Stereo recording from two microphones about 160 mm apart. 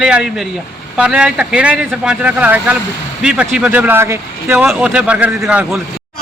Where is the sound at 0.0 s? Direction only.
5° right (ahead or behind).